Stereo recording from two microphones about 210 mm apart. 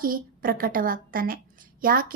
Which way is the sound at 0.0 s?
40° right (ahead or behind).